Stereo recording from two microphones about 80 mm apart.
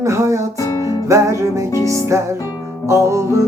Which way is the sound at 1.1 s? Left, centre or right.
Right.